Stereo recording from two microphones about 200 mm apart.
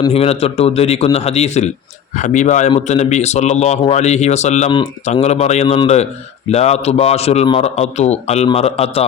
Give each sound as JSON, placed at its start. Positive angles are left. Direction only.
{"t": 0.0, "sound": "a man's voice", "side_deg": 30}